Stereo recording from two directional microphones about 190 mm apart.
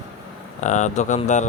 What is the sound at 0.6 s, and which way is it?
Speech, 40° left (ahead or behind).